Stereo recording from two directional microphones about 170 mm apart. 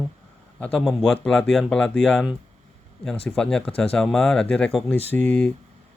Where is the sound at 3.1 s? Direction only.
35° left (ahead or behind).